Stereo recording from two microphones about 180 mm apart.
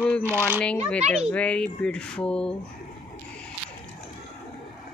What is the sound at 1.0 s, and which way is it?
Speech, 35° right (ahead or behind).